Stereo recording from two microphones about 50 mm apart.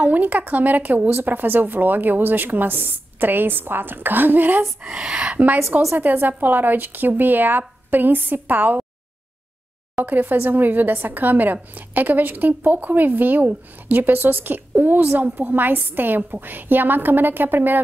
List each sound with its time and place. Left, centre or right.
0.0 s a woman's voice: right
5.0 s a woman's voice: right
10.0 s a woman's voice: right